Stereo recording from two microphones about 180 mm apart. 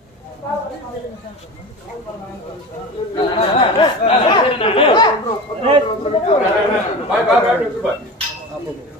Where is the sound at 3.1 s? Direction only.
30° left (ahead or behind).